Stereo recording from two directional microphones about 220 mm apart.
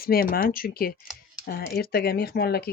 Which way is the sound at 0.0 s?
40° left (ahead or behind).